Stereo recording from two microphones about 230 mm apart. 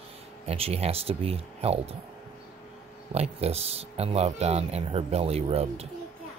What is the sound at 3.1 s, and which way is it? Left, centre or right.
Speech, right.